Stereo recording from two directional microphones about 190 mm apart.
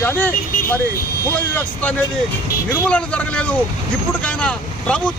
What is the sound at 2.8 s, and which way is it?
Speech, 5° left (ahead or behind).